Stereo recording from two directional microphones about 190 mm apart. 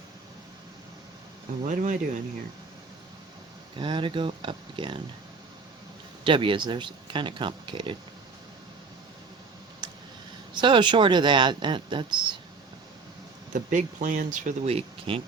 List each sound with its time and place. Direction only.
1.6 s speech: 40° right (ahead or behind)
3.8 s speech: 25° right (ahead or behind)
6.2 s speech: 25° right (ahead or behind)
9.8 s a sound: 25° right (ahead or behind)
10.5 s speech: 25° right (ahead or behind)
13.5 s speech: 45° right (ahead or behind)